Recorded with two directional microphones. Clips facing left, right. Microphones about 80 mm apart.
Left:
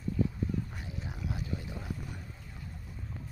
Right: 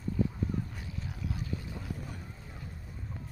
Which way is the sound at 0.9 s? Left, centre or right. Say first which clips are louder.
Even; left.